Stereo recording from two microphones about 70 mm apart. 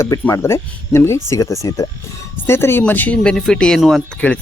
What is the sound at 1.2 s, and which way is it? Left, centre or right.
Speech, left.